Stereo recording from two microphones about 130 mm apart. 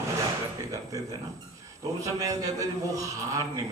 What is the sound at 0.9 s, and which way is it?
A man's voice, 25° right (ahead or behind).